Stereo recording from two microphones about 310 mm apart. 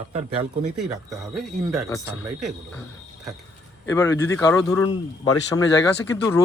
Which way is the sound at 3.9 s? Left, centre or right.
Centre.